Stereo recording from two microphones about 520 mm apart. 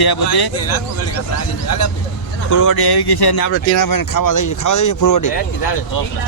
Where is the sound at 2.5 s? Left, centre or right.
Left.